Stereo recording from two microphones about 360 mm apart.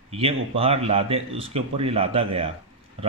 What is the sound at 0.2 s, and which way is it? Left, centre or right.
Speech, centre.